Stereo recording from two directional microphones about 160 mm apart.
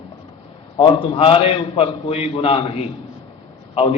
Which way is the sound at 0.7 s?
35° left (ahead or behind).